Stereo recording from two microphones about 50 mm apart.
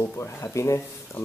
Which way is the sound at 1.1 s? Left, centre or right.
Left.